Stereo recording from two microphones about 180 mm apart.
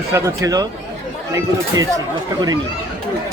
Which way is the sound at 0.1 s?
20° right (ahead or behind).